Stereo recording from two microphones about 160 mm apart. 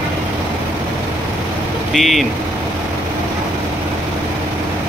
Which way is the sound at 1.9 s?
Centre (ahead or behind).